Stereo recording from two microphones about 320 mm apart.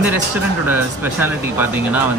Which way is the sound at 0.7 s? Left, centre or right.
Centre.